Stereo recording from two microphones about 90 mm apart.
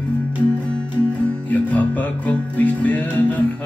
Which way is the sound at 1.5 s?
20° left (ahead or behind).